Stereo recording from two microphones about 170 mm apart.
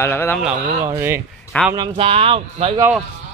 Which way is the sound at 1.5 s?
10° left (ahead or behind).